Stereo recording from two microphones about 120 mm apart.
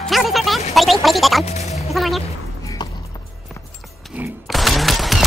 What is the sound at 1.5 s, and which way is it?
Music, 65° left (ahead or behind).